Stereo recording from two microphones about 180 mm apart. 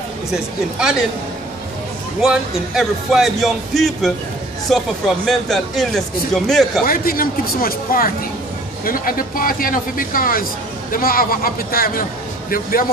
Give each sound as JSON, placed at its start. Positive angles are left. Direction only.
{"t": 0.3, "sound": "speech", "side_deg": -5}
{"t": 2.2, "sound": "speech", "side_deg": -5}
{"t": 6.9, "sound": "speech", "side_deg": 55}